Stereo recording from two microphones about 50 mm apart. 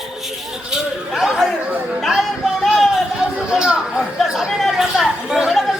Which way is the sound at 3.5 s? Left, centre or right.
Centre.